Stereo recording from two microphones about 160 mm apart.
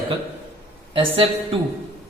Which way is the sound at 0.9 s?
35° right (ahead or behind).